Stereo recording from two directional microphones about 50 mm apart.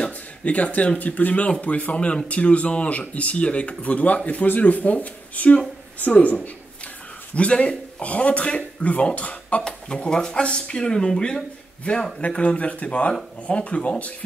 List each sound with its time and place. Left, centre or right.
0.0 s speech: left
6.1 s speech: left
9.6 s speech: centre